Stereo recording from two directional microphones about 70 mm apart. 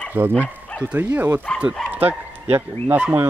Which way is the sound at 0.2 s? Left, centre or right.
Right.